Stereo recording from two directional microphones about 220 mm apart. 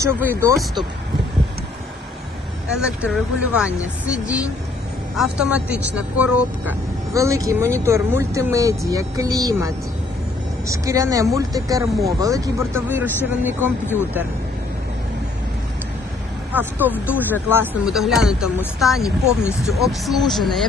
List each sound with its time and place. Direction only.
0.0 s speech: 10° right (ahead or behind)
2.7 s speech: 5° right (ahead or behind)
13.8 s speech: 10° left (ahead or behind)
16.5 s speech: 10° right (ahead or behind)